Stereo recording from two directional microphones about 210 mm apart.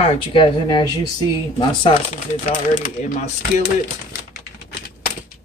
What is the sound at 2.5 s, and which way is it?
Speech, 40° left (ahead or behind).